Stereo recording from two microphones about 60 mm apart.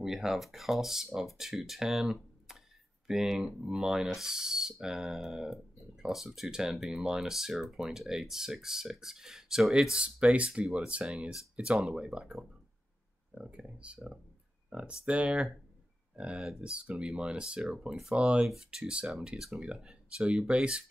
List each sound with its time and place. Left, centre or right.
0.0 s speech: centre